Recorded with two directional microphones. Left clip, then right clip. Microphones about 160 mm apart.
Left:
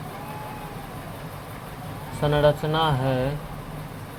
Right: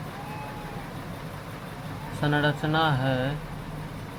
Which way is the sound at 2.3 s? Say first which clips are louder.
Left 5 dB; 20° left (ahead or behind).